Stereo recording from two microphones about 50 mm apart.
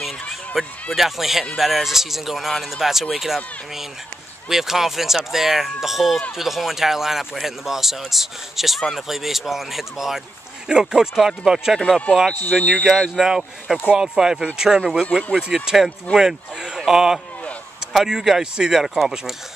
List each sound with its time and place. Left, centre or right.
0.6 s speech: centre
12.4 s speech: left
13.1 s speech: centre
15.1 s speech: centre
15.5 s speech: centre